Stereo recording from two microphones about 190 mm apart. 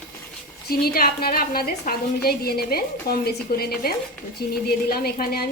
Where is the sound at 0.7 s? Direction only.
50° left (ahead or behind).